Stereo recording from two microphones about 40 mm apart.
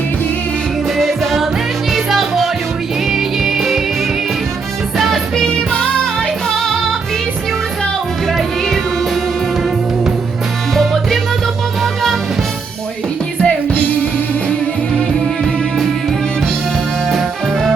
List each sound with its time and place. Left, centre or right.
0.9 s music: centre
4.9 s music: centre
8.3 s music: centre
10.8 s music: centre
13.4 s music: left
17.1 s music: centre